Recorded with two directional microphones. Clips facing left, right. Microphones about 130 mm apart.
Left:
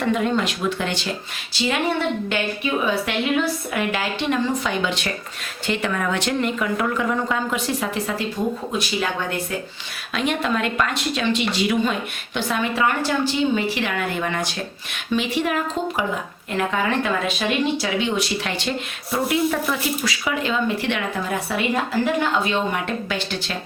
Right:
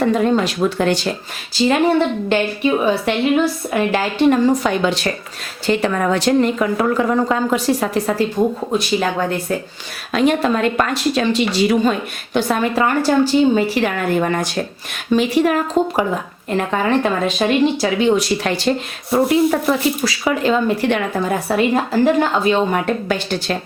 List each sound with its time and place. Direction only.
0.0 s speech: 35° right (ahead or behind)
2.3 s speech: 35° right (ahead or behind)
10.1 s speech: 40° right (ahead or behind)